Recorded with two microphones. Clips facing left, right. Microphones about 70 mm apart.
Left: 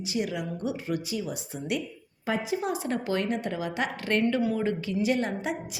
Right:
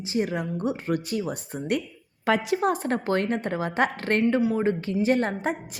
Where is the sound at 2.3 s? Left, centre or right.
Right.